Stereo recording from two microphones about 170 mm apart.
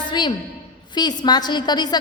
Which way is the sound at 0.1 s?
25° left (ahead or behind).